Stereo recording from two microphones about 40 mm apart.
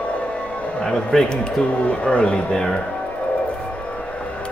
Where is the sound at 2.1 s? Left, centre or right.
Left.